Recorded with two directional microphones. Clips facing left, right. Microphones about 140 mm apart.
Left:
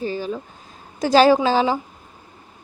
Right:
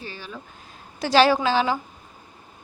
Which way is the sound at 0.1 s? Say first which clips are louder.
Left 13 dB; 35° left (ahead or behind).